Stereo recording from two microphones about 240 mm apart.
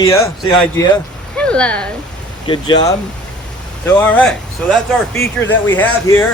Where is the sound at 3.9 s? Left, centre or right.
Centre.